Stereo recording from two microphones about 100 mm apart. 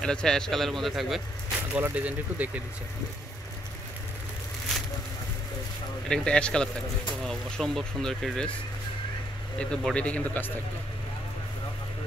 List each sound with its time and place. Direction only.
0.0 s speech: 10° left (ahead or behind)
1.7 s speech: 20° right (ahead or behind)
6.0 s speech: 10° left (ahead or behind)
9.6 s speech: 10° left (ahead or behind)